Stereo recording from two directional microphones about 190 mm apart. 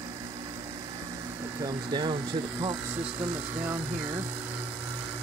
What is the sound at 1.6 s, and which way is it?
Speech, 20° right (ahead or behind).